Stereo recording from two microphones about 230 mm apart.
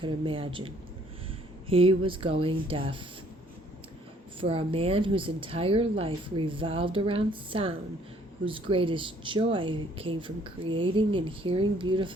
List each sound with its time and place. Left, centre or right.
0.0 s a woman's voice: right
1.7 s a woman's voice: right
4.4 s a woman's voice: right